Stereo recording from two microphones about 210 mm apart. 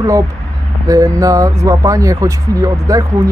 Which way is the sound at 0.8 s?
15° right (ahead or behind).